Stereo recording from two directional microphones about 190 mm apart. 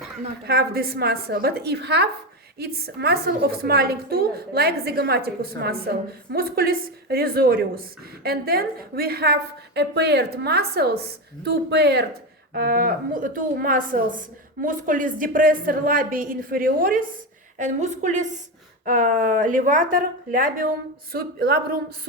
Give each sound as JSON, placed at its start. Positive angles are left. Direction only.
{"t": 0.4, "sound": "a woman's voice", "side_deg": -55}